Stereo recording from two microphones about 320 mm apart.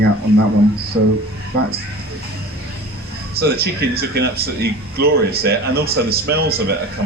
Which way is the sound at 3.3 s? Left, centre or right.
Right.